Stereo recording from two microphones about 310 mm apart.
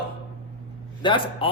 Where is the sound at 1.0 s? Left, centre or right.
Centre.